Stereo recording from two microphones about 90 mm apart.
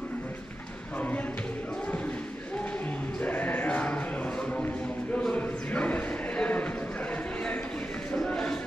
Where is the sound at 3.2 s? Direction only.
20° left (ahead or behind).